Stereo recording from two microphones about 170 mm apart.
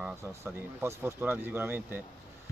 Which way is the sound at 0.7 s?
15° right (ahead or behind).